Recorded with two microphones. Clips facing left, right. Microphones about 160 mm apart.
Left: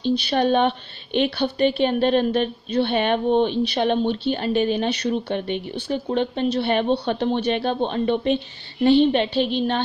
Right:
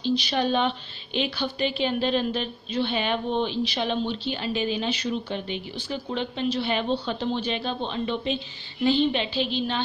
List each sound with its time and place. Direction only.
0.3 s a woman's voice: 55° left (ahead or behind)